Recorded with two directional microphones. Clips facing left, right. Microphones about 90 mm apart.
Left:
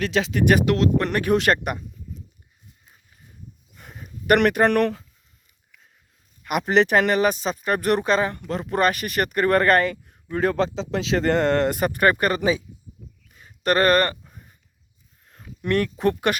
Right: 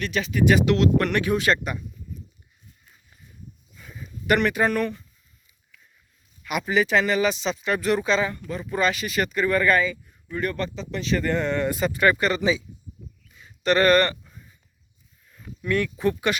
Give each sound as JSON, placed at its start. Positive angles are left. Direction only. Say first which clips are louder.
{"t": 0.1, "sound": "speech", "louder": "right 1 dB", "side_deg": 90}
{"t": 0.5, "sound": "speech", "louder": "left 1 dB", "side_deg": 45}
{"t": 0.9, "sound": "speech", "louder": "even", "side_deg": 30}
{"t": 1.2, "sound": "speech", "louder": "left 3 dB", "side_deg": 55}
{"t": 3.8, "sound": "a sound", "louder": "even", "side_deg": 60}
{"t": 6.4, "sound": "speech", "louder": "left 4 dB", "side_deg": 50}
{"t": 6.9, "sound": "speech", "louder": "left 2 dB", "side_deg": 55}
{"t": 8.4, "sound": "speech", "louder": "left 3 dB", "side_deg": 70}
{"t": 10.3, "sound": "speech", "louder": "left 6 dB", "side_deg": 90}
{"t": 13.3, "sound": "a sound", "louder": "even", "side_deg": 45}
{"t": 15.3, "sound": "a sound", "louder": "left 2 dB", "side_deg": 65}
{"t": 15.8, "sound": "speech", "louder": "left 2 dB", "side_deg": 60}